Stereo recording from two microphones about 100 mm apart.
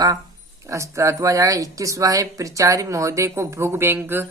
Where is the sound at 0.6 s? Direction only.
30° right (ahead or behind).